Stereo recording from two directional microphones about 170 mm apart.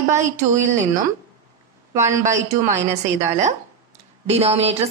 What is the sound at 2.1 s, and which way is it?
Speech, 45° right (ahead or behind).